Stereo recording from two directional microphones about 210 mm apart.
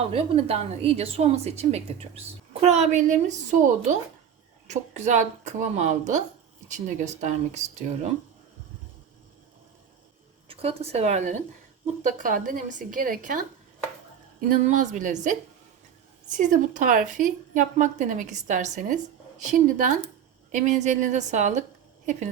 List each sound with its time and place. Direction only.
0.1 s a woman's voice: 30° right (ahead or behind)
10.5 s a woman's voice: 30° right (ahead or behind)
14.5 s a woman's voice: 40° right (ahead or behind)
16.4 s a woman's voice: 40° right (ahead or behind)